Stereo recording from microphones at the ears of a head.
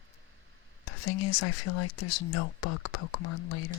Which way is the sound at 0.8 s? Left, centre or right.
Left.